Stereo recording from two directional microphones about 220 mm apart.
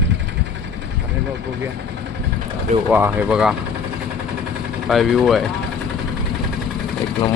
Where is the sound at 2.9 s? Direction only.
5° right (ahead or behind).